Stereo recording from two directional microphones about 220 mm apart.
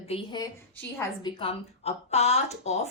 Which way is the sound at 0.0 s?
25° left (ahead or behind).